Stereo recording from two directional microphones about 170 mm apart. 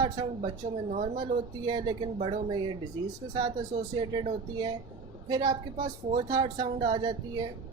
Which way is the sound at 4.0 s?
30° right (ahead or behind).